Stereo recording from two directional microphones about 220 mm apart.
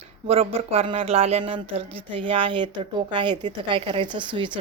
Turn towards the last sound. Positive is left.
turn(degrees=-20)  # may be behind; listen again after turning